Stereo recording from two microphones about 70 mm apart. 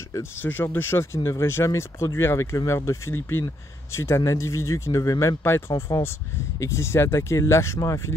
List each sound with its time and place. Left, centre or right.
0.4 s speech: left
5.4 s speech: left